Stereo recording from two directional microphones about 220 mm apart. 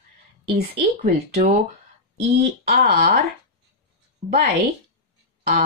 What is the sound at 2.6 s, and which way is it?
Speech, 45° right (ahead or behind).